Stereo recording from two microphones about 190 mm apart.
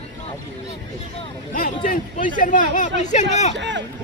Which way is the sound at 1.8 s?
45° left (ahead or behind).